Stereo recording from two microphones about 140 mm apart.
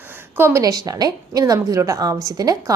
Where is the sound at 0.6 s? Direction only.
25° right (ahead or behind).